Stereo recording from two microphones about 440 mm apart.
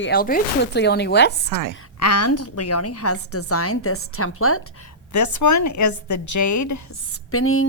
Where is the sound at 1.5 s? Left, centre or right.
Right.